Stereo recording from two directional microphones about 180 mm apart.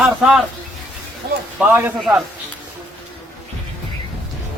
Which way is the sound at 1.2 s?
60° right (ahead or behind).